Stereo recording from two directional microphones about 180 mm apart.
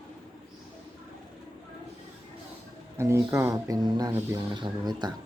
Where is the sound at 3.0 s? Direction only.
15° right (ahead or behind).